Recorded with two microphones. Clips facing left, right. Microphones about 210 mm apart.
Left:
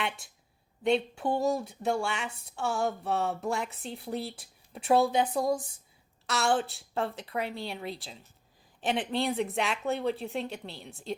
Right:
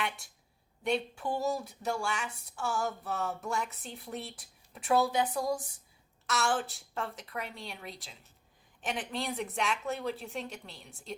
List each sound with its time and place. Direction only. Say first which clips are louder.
0.9 s speech: left 5 dB; 25° left (ahead or behind)
6.2 s a woman's voice: left 3 dB; 30° left (ahead or behind)